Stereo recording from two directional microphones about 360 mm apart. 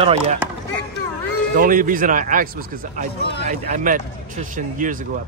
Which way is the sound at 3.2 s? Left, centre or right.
Left.